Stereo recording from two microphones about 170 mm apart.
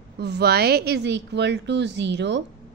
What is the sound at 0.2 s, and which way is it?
A woman's voice, 75° right (ahead or behind).